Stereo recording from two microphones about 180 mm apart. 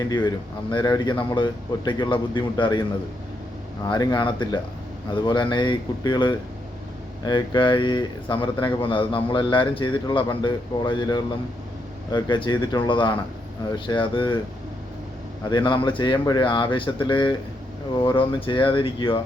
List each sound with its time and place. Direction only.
0.0 s speech: 20° left (ahead or behind)
3.8 s speech: 25° left (ahead or behind)
15.4 s speech: 25° left (ahead or behind)